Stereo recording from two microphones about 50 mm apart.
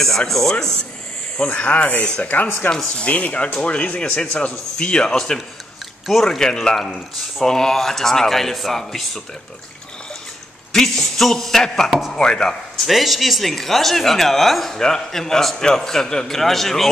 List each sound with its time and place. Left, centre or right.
0.3 s a man's voice: centre
1.5 s a man's voice: left
2.7 s a man's voice: centre
3.1 s a man's voice: left; by 9.2 s centre
10.7 s a man's voice: centre